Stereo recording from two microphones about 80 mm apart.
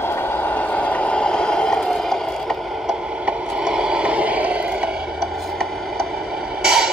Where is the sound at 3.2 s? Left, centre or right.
Centre.